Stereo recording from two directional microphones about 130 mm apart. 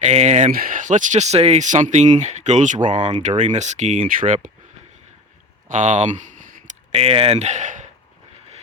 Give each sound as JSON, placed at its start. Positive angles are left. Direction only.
{"t": 0.0, "sound": "speech", "side_deg": -55}
{"t": 5.6, "sound": "a sound", "side_deg": -70}
{"t": 6.9, "sound": "speech", "side_deg": -50}